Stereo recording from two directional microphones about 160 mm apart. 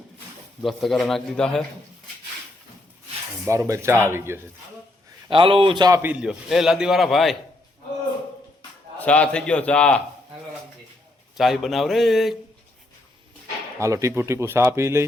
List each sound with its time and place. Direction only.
0.6 s a man's voice: centre (ahead or behind)
3.4 s speech: 20° right (ahead or behind)
5.3 s a man's voice: 35° right (ahead or behind)
6.0 s a man's voice: 10° right (ahead or behind)
9.0 s a man's voice: 5° left (ahead or behind)
11.3 s a man's voice: centre (ahead or behind)
13.7 s speech: 20° right (ahead or behind)